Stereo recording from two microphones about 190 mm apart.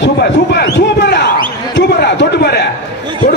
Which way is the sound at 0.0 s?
65° left (ahead or behind).